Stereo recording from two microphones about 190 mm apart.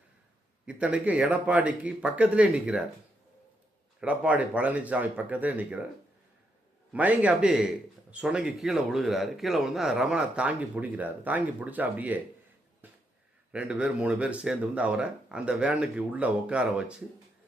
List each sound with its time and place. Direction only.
0.6 s speech: 5° right (ahead or behind)
4.0 s speech: 5° right (ahead or behind)
6.9 s a man's voice: 10° right (ahead or behind)
12.8 s a sound: 10° right (ahead or behind)
13.5 s speech: 5° right (ahead or behind)